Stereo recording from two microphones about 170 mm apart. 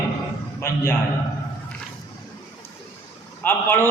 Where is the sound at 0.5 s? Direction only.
15° left (ahead or behind).